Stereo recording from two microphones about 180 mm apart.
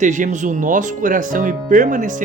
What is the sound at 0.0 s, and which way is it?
Speech, 45° right (ahead or behind).